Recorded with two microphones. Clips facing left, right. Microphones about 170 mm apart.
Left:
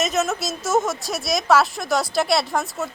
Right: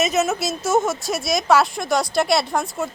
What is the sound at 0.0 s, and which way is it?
A woman's voice, centre (ahead or behind).